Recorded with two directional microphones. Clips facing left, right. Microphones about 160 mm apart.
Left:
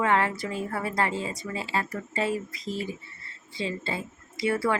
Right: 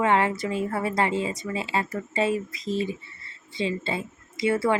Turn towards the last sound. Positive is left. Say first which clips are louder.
# right 3 dB
turn(degrees=-20)  # may be behind; listen again after turning